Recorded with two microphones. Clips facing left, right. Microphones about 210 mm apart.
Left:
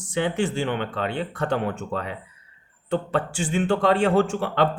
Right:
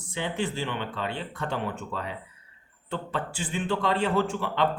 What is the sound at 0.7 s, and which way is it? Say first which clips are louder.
Speech: left 5 dB; 60° left (ahead or behind).